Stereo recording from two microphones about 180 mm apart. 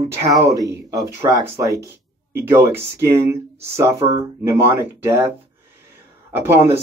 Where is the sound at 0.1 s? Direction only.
15° right (ahead or behind).